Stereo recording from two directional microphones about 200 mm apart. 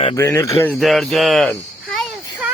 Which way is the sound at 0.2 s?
15° left (ahead or behind).